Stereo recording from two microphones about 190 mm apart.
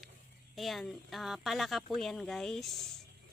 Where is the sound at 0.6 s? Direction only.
Centre (ahead or behind).